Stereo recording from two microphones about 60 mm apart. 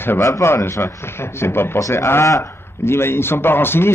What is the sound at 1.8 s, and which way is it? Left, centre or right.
A man's voice, left.